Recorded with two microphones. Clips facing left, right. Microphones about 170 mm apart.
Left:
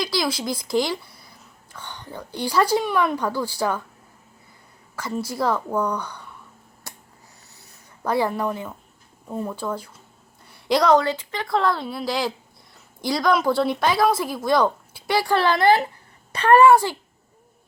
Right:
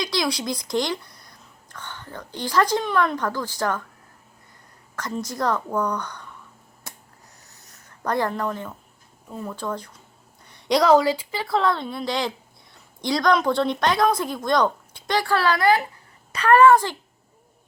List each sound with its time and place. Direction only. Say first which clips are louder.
0.0 s a woman's voice: left 1 dB; centre (ahead or behind)
4.9 s a woman's voice: left 2 dB; 5° left (ahead or behind)
8.0 s a woman's voice: left 2 dB; 10° left (ahead or behind)
15.4 s a woman's voice: left 2 dB; 25° left (ahead or behind)
16.6 s a woman's voice: even; 10° left (ahead or behind)